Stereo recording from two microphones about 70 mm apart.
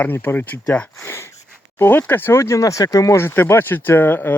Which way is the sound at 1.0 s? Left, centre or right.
Left.